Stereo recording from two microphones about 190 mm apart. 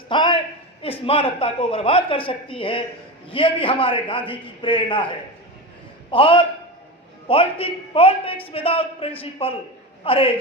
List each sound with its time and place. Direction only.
0.1 s a man's voice: 25° left (ahead or behind)